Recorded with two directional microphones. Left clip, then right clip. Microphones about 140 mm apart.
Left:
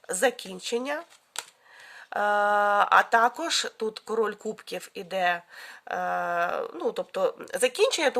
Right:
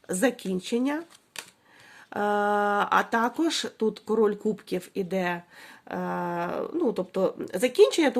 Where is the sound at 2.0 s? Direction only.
30° left (ahead or behind).